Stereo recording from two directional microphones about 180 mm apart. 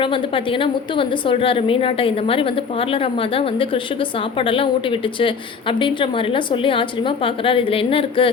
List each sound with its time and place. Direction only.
0.0 s a woman's voice: 30° left (ahead or behind)